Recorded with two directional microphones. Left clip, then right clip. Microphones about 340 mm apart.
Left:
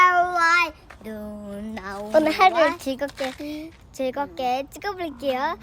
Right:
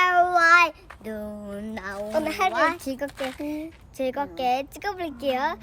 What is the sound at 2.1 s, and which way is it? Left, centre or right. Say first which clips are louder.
Speech: left 8 dB; left.